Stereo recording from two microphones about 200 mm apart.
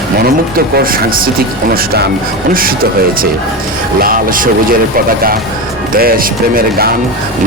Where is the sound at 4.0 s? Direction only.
45° right (ahead or behind).